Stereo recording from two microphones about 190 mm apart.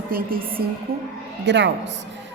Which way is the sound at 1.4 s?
65° right (ahead or behind).